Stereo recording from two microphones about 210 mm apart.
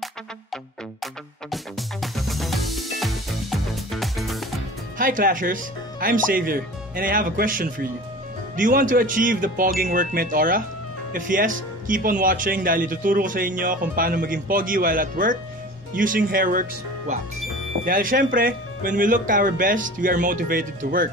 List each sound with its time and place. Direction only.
1.0 s music: centre (ahead or behind)
4.9 s speech: 40° right (ahead or behind)
17.8 s speech: 45° right (ahead or behind)